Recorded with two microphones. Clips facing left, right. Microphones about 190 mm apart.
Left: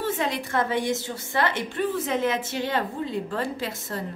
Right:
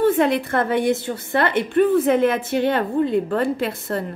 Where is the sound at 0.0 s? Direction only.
55° right (ahead or behind).